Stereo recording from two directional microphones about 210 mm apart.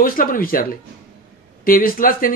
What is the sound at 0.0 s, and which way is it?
Speech, 40° left (ahead or behind).